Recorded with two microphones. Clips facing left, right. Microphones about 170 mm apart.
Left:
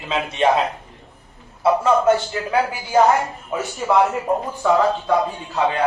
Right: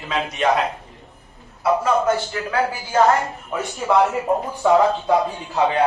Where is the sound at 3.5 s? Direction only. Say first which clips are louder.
Left 1 dB; 10° left (ahead or behind).